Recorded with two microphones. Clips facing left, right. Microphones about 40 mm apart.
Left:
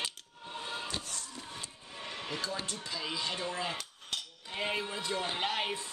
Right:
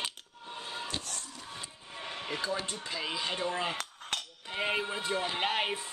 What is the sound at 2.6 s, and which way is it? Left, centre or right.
Speech, right.